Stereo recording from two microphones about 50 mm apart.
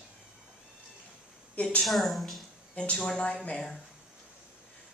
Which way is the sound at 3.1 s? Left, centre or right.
Left.